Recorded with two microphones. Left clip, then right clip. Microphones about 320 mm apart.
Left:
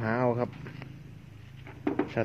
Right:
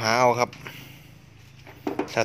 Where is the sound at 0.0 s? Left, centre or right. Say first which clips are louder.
Right 8 dB; right.